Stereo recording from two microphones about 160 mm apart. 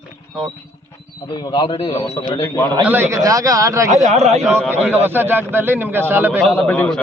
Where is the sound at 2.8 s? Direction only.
15° right (ahead or behind).